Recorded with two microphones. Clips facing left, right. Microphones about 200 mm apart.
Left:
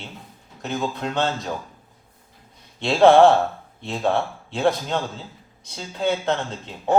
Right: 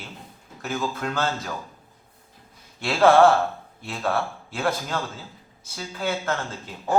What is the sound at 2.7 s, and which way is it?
Speech, 25° left (ahead or behind).